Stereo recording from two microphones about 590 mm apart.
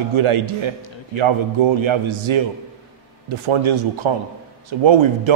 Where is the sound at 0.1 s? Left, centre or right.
Right.